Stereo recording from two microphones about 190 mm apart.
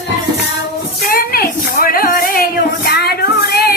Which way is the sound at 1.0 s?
50° left (ahead or behind).